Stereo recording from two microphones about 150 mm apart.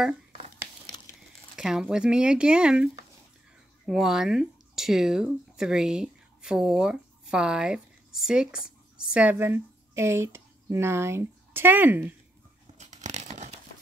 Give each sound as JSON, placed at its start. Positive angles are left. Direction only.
{"t": 1.6, "sound": "speech", "side_deg": -5}
{"t": 12.7, "sound": "tearing", "side_deg": -50}